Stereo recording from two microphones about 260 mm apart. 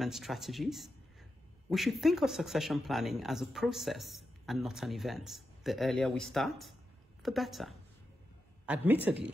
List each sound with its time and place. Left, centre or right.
0.0 s speech: centre
9.1 s speech: centre